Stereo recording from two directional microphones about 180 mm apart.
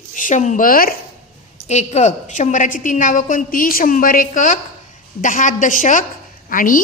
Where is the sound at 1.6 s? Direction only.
40° left (ahead or behind).